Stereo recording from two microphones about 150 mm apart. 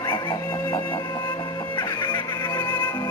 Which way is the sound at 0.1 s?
30° left (ahead or behind).